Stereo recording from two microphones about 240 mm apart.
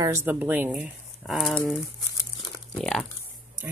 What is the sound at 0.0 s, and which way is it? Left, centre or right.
Speech, centre.